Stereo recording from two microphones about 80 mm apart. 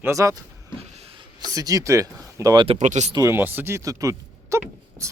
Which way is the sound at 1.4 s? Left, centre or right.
Right.